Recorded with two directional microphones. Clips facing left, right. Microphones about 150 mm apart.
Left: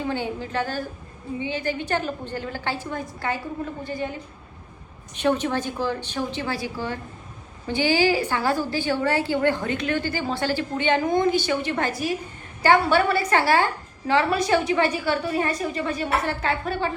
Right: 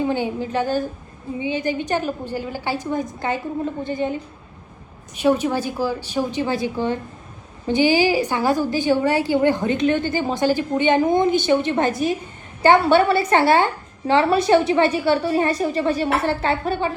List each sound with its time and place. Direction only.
0.0 s a woman's voice: 15° right (ahead or behind)
5.1 s a woman's voice: 10° right (ahead or behind); by 16.7 s 30° right (ahead or behind)